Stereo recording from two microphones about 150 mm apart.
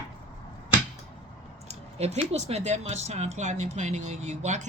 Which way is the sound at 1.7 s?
45° right (ahead or behind).